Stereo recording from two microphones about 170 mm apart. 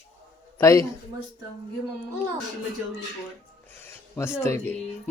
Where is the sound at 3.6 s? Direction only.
15° left (ahead or behind).